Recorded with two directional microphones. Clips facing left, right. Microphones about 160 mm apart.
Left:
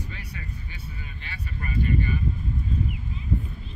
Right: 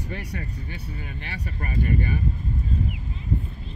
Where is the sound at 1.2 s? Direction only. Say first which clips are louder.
Right 1 dB; 45° right (ahead or behind).